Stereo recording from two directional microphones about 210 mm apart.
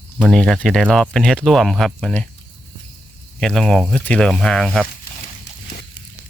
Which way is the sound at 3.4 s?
5° left (ahead or behind).